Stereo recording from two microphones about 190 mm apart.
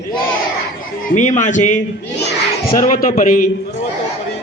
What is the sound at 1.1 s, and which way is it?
Speech, 40° left (ahead or behind).